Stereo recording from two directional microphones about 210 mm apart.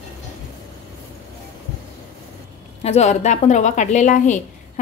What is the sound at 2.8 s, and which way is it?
A woman's voice, 30° left (ahead or behind).